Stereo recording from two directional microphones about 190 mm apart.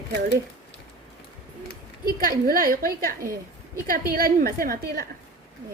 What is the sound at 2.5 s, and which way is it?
A woman's voice, 50° right (ahead or behind).